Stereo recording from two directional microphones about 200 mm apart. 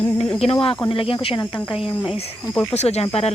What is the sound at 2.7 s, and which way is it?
Speech, 35° left (ahead or behind).